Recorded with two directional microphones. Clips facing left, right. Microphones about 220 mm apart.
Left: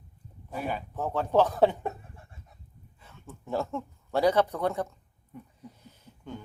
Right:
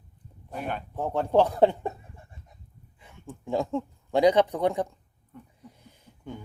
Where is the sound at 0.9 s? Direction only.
15° right (ahead or behind).